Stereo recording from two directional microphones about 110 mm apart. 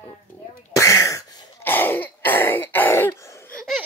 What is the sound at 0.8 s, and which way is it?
Throat clearing, 30° left (ahead or behind).